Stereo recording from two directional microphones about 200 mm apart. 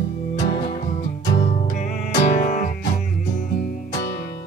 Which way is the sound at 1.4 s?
35° left (ahead or behind).